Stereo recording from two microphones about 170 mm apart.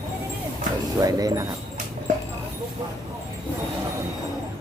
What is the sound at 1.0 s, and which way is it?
Speech, 20° right (ahead or behind).